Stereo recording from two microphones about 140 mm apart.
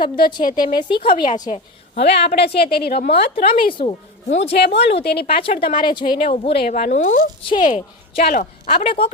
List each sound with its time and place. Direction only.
0.0 s a woman's voice: 35° left (ahead or behind)
2.6 s a woman's voice: 90° left
3.1 s a woman's voice: 40° left (ahead or behind)
6.7 s speech: 60° left (ahead or behind)
7.6 s a woman's voice: 60° left (ahead or behind)
8.4 s a woman's voice: 45° left (ahead or behind)